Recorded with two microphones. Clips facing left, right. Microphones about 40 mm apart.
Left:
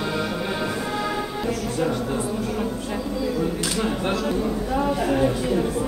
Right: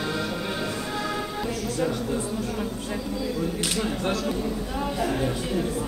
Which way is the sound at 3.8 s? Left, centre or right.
Centre.